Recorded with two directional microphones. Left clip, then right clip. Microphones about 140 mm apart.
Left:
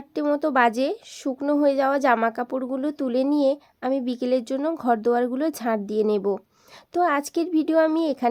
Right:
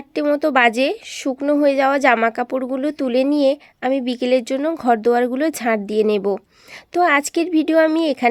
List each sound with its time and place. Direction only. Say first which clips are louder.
0.1 s speech: right 5 dB; 25° right (ahead or behind)